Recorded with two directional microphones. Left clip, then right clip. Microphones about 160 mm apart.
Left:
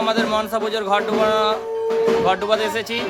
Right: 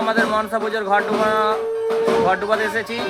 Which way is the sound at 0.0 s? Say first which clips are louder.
Right 1 dB; centre (ahead or behind).